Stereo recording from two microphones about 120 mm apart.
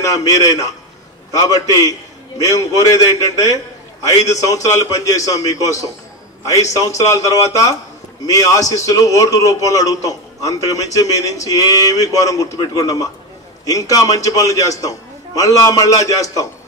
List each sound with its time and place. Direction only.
0.0 s a man's voice: 30° left (ahead or behind)